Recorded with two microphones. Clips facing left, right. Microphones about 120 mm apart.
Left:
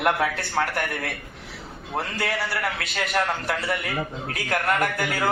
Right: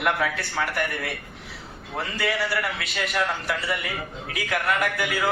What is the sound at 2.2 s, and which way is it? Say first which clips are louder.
Speech: right 3 dB; 40° left (ahead or behind).